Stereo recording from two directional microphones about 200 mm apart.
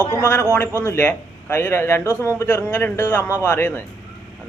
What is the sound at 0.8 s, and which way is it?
Speech, 10° left (ahead or behind).